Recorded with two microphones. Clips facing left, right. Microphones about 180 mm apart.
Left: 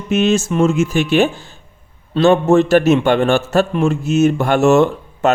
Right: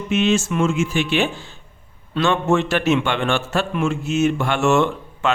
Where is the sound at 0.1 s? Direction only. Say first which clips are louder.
Left 4 dB; 40° left (ahead or behind).